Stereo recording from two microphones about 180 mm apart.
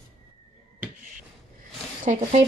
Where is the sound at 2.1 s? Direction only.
40° right (ahead or behind).